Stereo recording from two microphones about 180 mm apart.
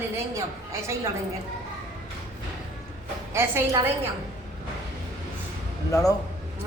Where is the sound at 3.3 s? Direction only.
15° right (ahead or behind).